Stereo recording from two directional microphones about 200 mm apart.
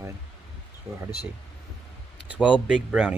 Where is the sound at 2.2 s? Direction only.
5° right (ahead or behind).